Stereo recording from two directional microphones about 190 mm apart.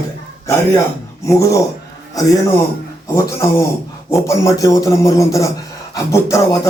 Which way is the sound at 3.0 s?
15° left (ahead or behind).